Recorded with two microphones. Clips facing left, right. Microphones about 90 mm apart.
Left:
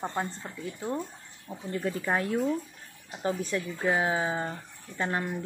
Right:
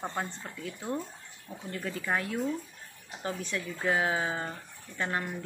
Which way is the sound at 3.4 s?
40° left (ahead or behind).